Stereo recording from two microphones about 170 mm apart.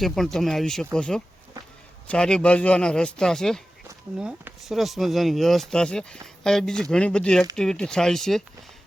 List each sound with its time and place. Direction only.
0.0 s speech: centre (ahead or behind)